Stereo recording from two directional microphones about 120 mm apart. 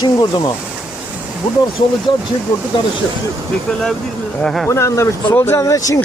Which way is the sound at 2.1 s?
40° left (ahead or behind).